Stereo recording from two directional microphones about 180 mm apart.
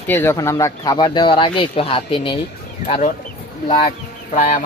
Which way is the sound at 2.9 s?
40° left (ahead or behind).